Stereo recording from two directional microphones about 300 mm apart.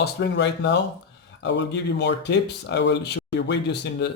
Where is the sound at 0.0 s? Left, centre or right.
Left.